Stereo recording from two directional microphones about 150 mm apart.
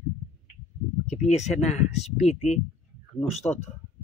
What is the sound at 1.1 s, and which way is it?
Speech, 50° left (ahead or behind).